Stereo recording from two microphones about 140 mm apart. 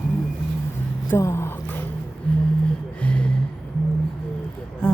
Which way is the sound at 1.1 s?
20° left (ahead or behind).